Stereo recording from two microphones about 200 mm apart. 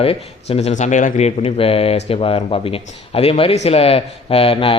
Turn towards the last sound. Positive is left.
turn(degrees=30)  # may be behind; listen again after turning